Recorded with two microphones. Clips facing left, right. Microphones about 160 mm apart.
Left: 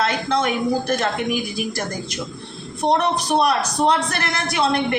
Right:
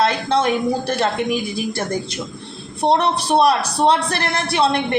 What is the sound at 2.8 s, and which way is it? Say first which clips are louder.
A man's voice: right 2 dB; 30° right (ahead or behind).